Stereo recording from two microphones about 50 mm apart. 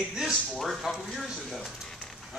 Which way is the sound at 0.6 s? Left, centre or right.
Centre.